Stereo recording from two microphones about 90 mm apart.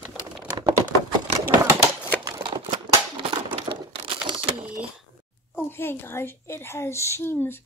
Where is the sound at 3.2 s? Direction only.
85° right.